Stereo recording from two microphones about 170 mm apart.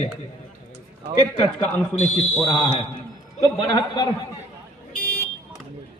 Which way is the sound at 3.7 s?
25° left (ahead or behind).